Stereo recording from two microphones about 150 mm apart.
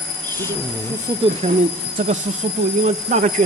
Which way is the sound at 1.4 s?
50° right (ahead or behind).